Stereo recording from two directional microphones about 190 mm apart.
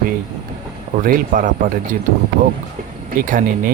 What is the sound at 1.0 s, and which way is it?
Speech, 45° right (ahead or behind).